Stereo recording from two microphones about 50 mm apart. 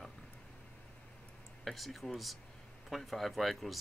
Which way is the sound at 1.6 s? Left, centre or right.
Centre.